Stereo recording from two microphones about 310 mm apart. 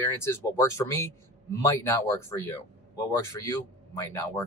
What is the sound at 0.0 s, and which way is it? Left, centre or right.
A man's voice, centre.